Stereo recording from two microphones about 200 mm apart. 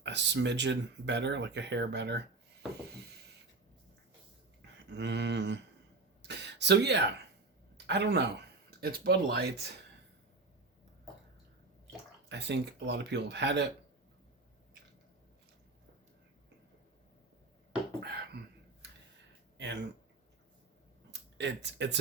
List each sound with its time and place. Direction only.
0.0 s speech: 60° right (ahead or behind)
4.9 s speech: 60° right (ahead or behind)
6.2 s a sound: 55° right (ahead or behind)
7.9 s speech: 55° right (ahead or behind)
12.3 s speech: 60° right (ahead or behind)
18.0 s a sound: 55° right (ahead or behind)
21.1 s speech: 60° right (ahead or behind)